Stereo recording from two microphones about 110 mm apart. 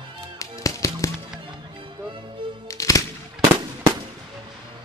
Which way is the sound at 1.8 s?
45° right (ahead or behind).